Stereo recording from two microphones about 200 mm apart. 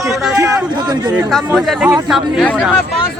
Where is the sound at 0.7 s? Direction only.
20° right (ahead or behind).